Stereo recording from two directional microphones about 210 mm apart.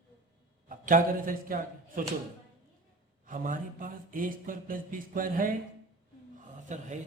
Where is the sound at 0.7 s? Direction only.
40° right (ahead or behind).